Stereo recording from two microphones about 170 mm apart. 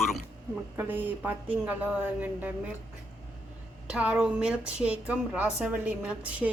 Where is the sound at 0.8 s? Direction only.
10° right (ahead or behind).